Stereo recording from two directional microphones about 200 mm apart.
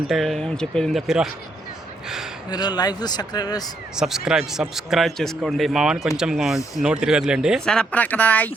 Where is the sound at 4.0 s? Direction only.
5° right (ahead or behind).